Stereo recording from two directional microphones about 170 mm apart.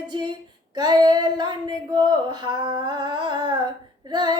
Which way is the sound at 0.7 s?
25° right (ahead or behind).